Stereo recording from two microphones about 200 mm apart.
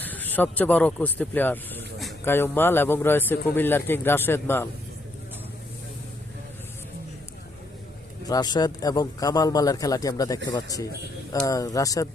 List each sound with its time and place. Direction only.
0.0 s speech: 10° left (ahead or behind)
8.3 s a man's voice: 20° left (ahead or behind)